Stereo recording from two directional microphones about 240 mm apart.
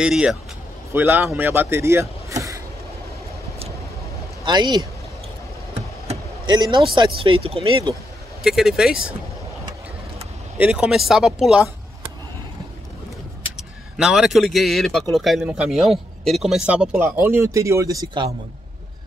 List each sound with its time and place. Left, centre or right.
0.0 s a man's voice: centre
4.5 s speech: centre
6.0 s vehicle: centre
7.2 s speech: right
8.5 s a man's voice: centre
10.6 s a man's voice: centre
13.6 s a man's voice: centre